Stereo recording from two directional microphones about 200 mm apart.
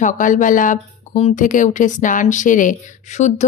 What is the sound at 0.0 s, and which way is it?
Speech, 40° left (ahead or behind).